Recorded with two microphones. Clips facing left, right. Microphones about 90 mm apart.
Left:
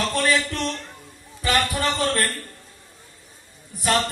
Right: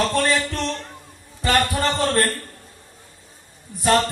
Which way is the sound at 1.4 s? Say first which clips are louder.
Right 3 dB; 30° right (ahead or behind).